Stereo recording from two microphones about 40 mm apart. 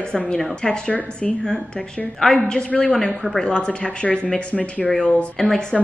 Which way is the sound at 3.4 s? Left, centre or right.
Left.